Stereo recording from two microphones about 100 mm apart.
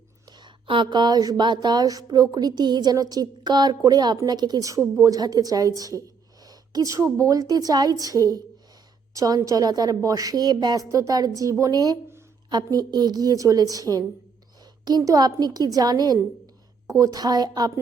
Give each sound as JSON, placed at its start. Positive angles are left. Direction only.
{"t": 0.3, "sound": "a sound", "side_deg": -50}
{"t": 4.2, "sound": "a woman's voice", "side_deg": -45}
{"t": 9.1, "sound": "a woman's voice", "side_deg": -35}
{"t": 10.8, "sound": "a woman's voice", "side_deg": -35}
{"t": 14.8, "sound": "a woman's voice", "side_deg": -40}